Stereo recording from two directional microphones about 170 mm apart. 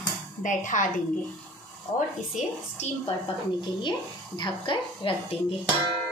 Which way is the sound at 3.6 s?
25° left (ahead or behind).